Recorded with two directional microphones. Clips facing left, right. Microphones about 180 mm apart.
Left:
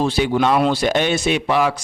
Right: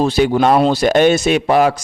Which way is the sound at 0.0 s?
40° right (ahead or behind).